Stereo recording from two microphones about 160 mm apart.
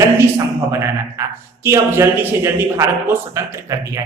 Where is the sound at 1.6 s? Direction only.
15° right (ahead or behind).